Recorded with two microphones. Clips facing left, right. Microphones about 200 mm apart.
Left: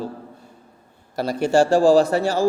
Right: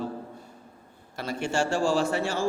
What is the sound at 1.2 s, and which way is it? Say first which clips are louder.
Speech: left 10 dB; 35° left (ahead or behind).